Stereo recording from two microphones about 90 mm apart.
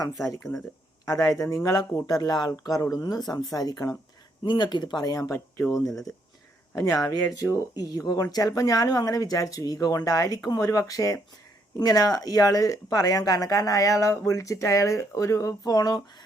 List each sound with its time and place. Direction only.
0.3 s speech: 5° left (ahead or behind)
1.0 s a woman's voice: 40° left (ahead or behind)
4.4 s speech: 60° left (ahead or behind)
5.3 s speech: 30° left (ahead or behind)
6.7 s a woman's voice: 45° left (ahead or behind)